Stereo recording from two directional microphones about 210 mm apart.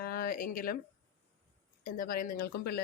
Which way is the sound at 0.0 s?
45° left (ahead or behind).